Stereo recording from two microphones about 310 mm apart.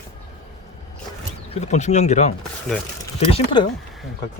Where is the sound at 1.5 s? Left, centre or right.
Left.